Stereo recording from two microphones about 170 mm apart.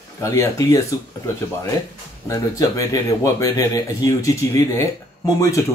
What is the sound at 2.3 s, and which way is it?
Speech, 20° left (ahead or behind).